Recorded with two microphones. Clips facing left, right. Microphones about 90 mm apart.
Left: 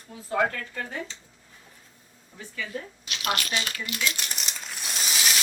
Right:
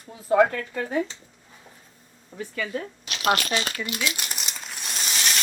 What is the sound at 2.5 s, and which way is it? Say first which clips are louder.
Speech: right 5 dB; 70° right (ahead or behind).